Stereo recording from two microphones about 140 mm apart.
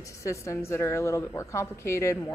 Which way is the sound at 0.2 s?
20° left (ahead or behind).